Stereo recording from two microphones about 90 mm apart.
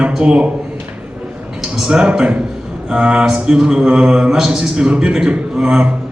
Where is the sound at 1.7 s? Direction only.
10° right (ahead or behind).